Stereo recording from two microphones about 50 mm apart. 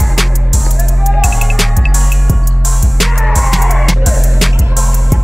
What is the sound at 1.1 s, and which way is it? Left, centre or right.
Music, centre.